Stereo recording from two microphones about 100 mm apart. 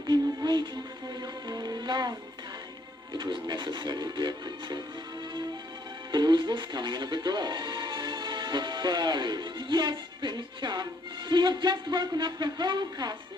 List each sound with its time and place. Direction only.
0.1 s speech: 50° right (ahead or behind)
1.2 s music: 40° right (ahead or behind)
3.1 s speech: 55° right (ahead or behind)
6.1 s speech: 50° right (ahead or behind)